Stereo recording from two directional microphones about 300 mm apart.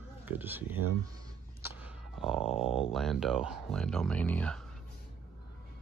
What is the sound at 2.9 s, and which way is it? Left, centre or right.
Speech, centre.